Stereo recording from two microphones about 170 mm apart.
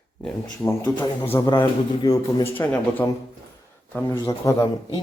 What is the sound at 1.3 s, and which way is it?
A man's voice, 20° left (ahead or behind).